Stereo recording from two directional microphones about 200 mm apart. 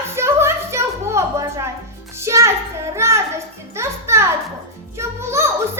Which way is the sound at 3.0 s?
15° right (ahead or behind).